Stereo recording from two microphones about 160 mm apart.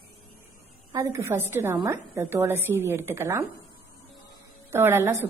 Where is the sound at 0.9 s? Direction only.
15° right (ahead or behind).